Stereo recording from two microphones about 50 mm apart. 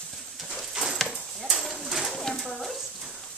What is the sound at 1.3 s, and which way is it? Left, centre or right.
Bird, centre.